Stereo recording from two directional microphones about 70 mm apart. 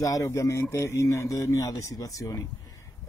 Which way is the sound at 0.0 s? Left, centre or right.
Left.